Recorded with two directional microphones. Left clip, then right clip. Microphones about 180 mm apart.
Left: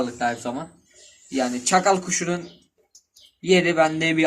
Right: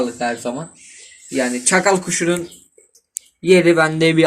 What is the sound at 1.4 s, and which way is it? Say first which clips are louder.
Speech: right 4 dB; 30° right (ahead or behind).